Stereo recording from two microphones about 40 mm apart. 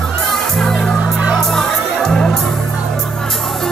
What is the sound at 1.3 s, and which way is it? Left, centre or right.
Music, centre.